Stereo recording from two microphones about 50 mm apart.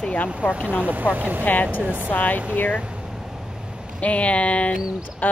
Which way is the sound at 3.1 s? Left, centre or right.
Centre.